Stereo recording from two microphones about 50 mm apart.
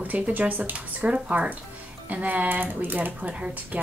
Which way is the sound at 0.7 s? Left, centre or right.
Right.